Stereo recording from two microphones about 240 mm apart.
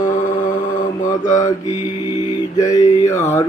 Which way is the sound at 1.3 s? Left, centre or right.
Centre.